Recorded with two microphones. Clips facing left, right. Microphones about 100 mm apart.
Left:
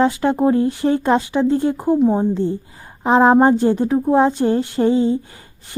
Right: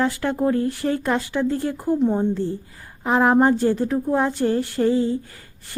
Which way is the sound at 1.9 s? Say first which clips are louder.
Left 4 dB; 5° left (ahead or behind).